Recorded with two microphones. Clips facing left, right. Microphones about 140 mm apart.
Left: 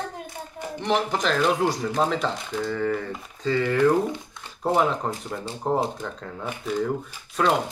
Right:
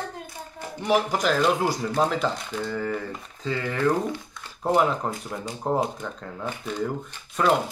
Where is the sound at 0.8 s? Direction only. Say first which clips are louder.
Right 1 dB; 10° right (ahead or behind).